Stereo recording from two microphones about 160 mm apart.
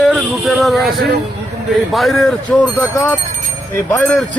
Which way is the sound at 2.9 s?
15° left (ahead or behind).